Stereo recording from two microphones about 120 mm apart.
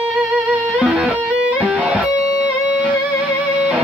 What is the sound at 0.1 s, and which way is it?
Music, 5° right (ahead or behind).